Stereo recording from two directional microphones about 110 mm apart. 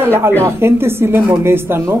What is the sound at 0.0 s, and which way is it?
A woman's voice, 20° right (ahead or behind).